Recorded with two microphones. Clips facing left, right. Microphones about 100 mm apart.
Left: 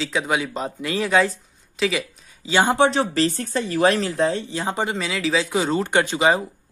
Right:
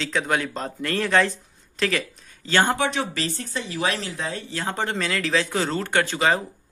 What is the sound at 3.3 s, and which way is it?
Speech, 45° left (ahead or behind).